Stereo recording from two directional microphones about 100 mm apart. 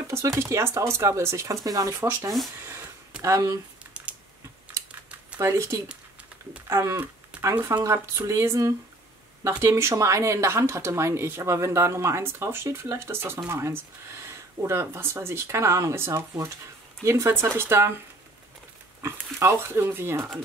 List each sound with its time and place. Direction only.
0.1 s speech: 30° right (ahead or behind)
3.2 s speech: 30° right (ahead or behind)
3.9 s typing: 10° right (ahead or behind)
5.4 s speech: 30° right (ahead or behind)
19.3 s speech: 25° right (ahead or behind)